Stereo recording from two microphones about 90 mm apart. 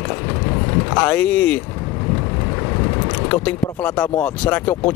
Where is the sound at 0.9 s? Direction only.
15° left (ahead or behind).